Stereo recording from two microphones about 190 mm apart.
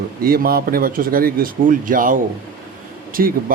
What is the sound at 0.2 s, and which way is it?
Speech, 50° right (ahead or behind).